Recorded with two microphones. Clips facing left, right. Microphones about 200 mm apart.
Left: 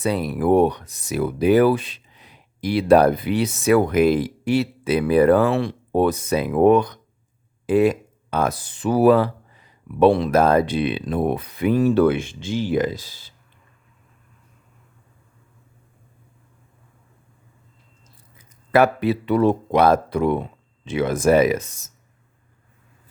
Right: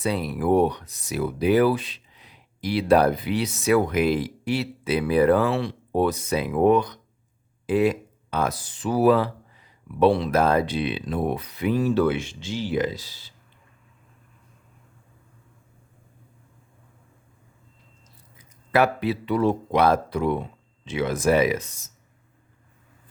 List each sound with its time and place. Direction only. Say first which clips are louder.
0.0 s speech: left 4 dB; 45° left (ahead or behind)
18.7 s speech: left 4 dB; 50° left (ahead or behind)